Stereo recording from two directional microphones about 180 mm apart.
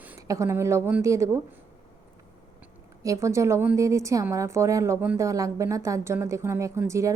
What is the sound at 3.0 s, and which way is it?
A woman's voice, 15° right (ahead or behind).